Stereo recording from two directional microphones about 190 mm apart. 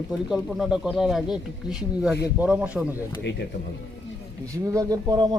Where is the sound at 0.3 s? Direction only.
Centre (ahead or behind).